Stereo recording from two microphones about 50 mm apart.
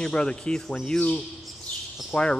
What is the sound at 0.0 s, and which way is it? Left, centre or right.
Speech, centre.